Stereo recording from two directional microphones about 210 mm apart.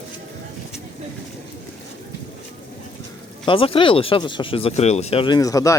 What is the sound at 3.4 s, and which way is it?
A man's voice, 25° left (ahead or behind).